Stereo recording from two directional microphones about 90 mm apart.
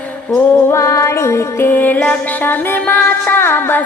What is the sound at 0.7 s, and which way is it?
Music, 35° left (ahead or behind).